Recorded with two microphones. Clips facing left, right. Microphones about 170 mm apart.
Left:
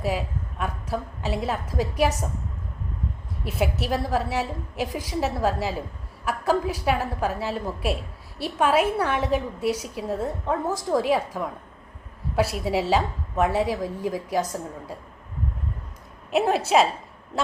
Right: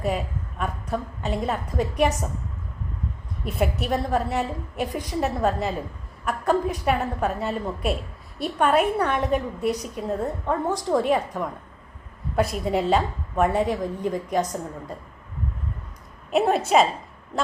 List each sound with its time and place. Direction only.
0.0 s a woman's voice: centre (ahead or behind)
3.4 s a woman's voice: 5° left (ahead or behind)
16.3 s a woman's voice: centre (ahead or behind)